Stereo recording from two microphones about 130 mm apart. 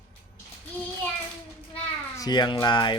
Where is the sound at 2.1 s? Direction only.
30° left (ahead or behind).